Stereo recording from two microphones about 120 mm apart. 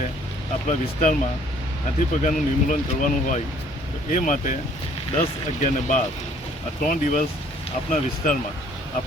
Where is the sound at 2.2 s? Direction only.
90° left.